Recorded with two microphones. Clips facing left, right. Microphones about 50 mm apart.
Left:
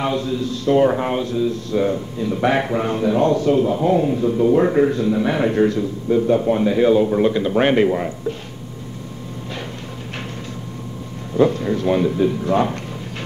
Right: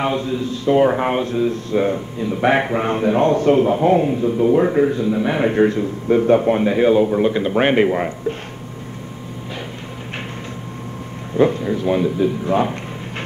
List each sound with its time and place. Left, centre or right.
0.0 s a man's voice: right
4.1 s a man's voice: right
4.6 s a man's voice: centre; by 5.9 s right
6.0 s a man's voice: right
6.6 s a man's voice: right
7.1 s speech: centre
7.3 s a man's voice: centre
11.3 s speech: right
11.6 s speech: centre